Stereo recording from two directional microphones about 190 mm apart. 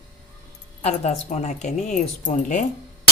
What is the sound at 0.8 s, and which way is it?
Speech, 35° left (ahead or behind).